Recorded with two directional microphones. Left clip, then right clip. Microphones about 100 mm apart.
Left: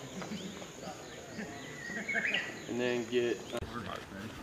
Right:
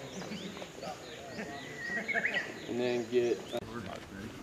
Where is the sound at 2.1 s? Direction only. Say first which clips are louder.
Even; 40° right (ahead or behind).